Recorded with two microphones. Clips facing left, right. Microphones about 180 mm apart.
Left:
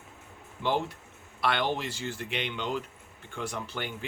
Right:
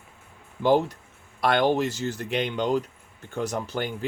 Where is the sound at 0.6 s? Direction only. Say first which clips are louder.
Right 8 dB; 40° right (ahead or behind).